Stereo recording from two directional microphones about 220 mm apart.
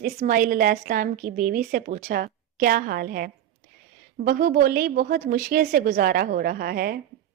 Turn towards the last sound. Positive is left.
turn(degrees=-45)  # may be behind; listen again after turning